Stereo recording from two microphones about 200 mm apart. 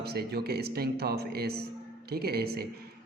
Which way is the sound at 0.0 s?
55° right (ahead or behind).